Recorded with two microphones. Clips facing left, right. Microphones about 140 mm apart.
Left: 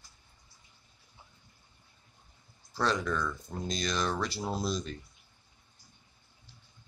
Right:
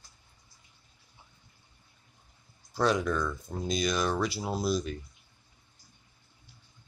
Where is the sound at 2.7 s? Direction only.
10° right (ahead or behind).